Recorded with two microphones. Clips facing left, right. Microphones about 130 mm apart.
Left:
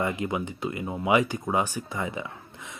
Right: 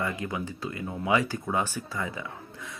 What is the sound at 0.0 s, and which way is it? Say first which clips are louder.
Speech: left 3 dB; 20° left (ahead or behind).